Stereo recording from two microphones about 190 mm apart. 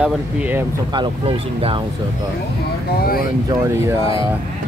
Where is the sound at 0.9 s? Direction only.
25° right (ahead or behind).